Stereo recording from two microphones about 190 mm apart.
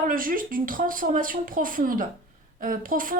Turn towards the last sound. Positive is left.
turn(degrees=-45)  # may be behind; listen again after turning